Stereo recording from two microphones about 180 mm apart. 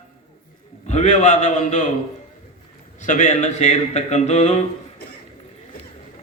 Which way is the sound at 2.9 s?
45° left (ahead or behind).